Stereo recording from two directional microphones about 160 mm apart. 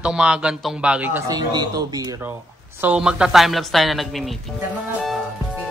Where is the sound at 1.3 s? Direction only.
25° right (ahead or behind).